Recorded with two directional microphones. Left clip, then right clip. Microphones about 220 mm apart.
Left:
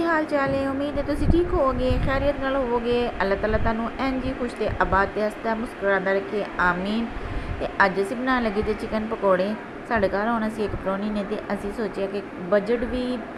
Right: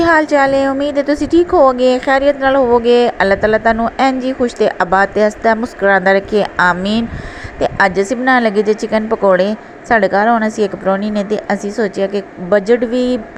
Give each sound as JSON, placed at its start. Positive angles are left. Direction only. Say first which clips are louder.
{"t": 0.0, "sound": "a woman's voice", "louder": "right 12 dB", "side_deg": -35}